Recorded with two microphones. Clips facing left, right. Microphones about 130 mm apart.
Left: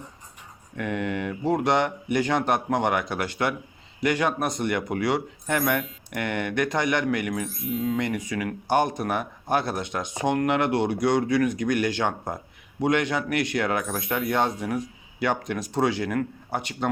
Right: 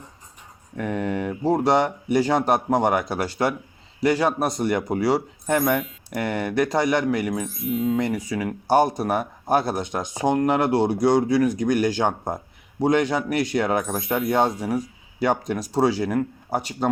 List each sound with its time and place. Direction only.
0.8 s speech: 35° right (ahead or behind)
7.4 s a sound: centre (ahead or behind)
8.3 s speech: 30° right (ahead or behind)
13.8 s a sound: centre (ahead or behind)
14.3 s speech: 40° right (ahead or behind)
14.5 s speech: 10° right (ahead or behind)
15.2 s speech: 35° right (ahead or behind)